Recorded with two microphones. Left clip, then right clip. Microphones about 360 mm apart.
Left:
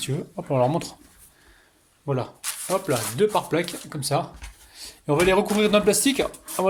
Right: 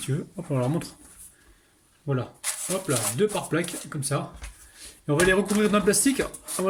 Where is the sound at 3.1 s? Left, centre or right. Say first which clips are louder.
Left 5 dB; centre.